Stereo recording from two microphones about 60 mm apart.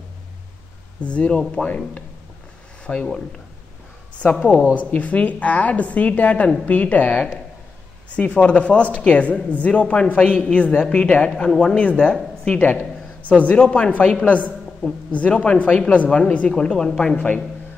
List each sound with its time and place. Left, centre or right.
1.0 s speech: centre
2.8 s speech: centre
4.2 s speech: centre
8.2 s speech: centre
13.3 s speech: left; by 17.3 s centre